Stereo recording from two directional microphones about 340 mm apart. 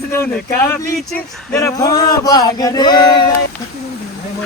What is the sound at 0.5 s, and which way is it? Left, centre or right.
Speech, centre.